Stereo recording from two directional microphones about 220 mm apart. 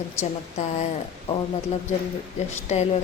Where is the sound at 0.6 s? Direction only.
30° left (ahead or behind).